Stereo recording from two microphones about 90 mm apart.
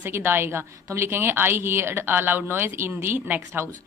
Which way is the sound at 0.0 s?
25° right (ahead or behind).